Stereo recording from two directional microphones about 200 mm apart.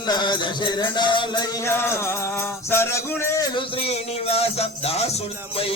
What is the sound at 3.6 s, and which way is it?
Music, 30° left (ahead or behind).